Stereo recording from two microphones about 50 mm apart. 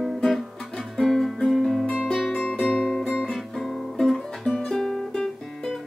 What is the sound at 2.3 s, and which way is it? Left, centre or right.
Music, left.